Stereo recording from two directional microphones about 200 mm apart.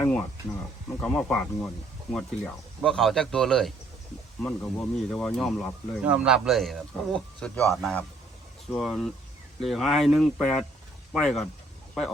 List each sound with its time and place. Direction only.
0.0 s speech: 5° left (ahead or behind)